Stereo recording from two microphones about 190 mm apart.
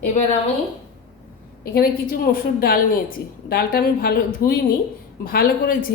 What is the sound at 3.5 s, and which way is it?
Speech, 55° left (ahead or behind).